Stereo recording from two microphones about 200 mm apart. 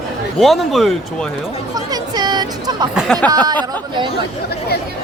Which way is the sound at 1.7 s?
20° right (ahead or behind).